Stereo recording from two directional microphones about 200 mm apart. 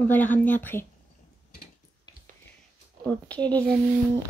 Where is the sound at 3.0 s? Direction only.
5° left (ahead or behind).